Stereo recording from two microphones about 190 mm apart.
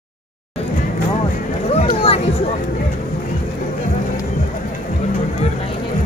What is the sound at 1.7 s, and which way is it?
Music, 30° left (ahead or behind).